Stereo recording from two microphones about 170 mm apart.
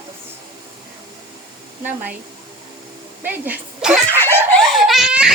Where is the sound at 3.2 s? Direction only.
10° right (ahead or behind).